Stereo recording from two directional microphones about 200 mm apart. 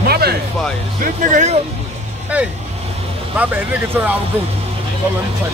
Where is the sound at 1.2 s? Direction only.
40° right (ahead or behind).